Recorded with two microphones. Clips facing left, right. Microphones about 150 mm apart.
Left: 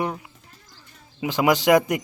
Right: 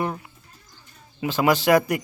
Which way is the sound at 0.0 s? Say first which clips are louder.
Even; 15° left (ahead or behind).